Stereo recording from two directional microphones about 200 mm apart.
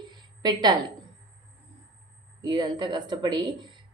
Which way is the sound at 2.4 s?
20° right (ahead or behind).